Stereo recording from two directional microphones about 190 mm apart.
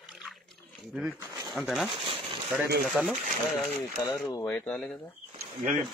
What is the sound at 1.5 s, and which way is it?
A man's voice, centre (ahead or behind).